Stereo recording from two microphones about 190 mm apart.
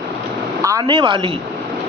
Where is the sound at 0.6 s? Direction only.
20° right (ahead or behind).